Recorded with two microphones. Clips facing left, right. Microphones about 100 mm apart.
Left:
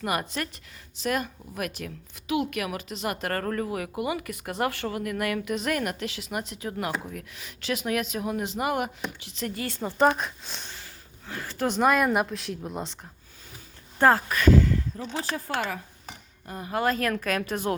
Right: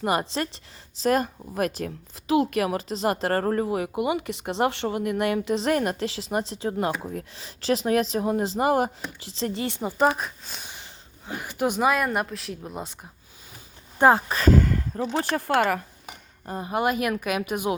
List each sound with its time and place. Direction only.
0.0 s speech: 25° right (ahead or behind)
10.2 s a woman's voice: centre (ahead or behind)
10.7 s a sound: 20° right (ahead or behind)
11.8 s a woman's voice: centre (ahead or behind)
14.0 s speech: 20° right (ahead or behind)
14.5 s speech: 50° right (ahead or behind)
15.2 s speech: 65° right (ahead or behind)
16.5 s speech: 25° right (ahead or behind)